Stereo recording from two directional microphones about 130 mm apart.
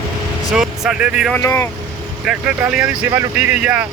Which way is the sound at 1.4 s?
20° left (ahead or behind).